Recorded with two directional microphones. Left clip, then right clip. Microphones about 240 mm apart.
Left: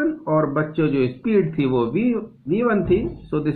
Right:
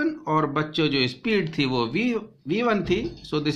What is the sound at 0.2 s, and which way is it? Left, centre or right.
Speech, right.